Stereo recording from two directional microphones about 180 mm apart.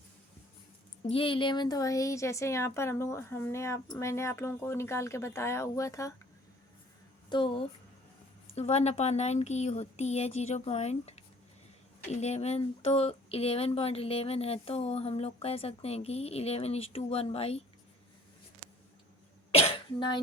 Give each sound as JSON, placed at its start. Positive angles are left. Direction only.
{"t": 1.0, "sound": "a woman's voice", "side_deg": 30}
{"t": 7.3, "sound": "speech", "side_deg": 25}
{"t": 19.5, "sound": "cough", "side_deg": 35}